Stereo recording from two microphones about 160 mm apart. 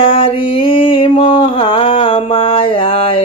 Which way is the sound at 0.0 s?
35° left (ahead or behind).